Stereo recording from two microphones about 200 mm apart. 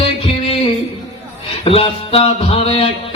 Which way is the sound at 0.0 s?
30° left (ahead or behind).